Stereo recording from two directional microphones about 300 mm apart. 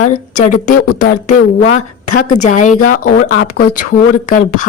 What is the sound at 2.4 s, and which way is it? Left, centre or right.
A woman's voice, left.